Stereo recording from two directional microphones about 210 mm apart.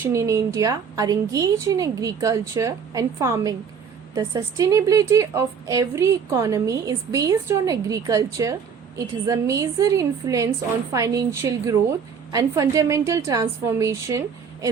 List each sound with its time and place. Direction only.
0.0 s a woman's voice: 15° right (ahead or behind)